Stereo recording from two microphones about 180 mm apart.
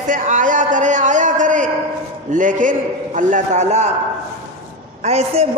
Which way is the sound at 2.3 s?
45° right (ahead or behind).